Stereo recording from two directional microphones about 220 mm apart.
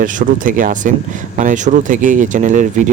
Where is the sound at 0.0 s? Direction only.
35° right (ahead or behind).